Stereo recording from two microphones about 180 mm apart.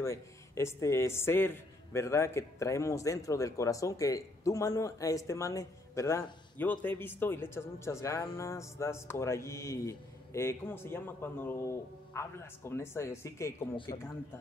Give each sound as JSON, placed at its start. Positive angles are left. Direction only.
{"t": 0.0, "sound": "a man's voice", "side_deg": 15}
{"t": 13.9, "sound": "speech", "side_deg": 35}